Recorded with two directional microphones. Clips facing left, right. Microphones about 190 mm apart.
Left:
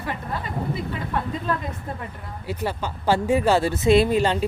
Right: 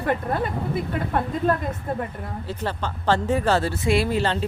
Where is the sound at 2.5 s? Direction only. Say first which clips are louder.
Left 2 dB; 10° left (ahead or behind).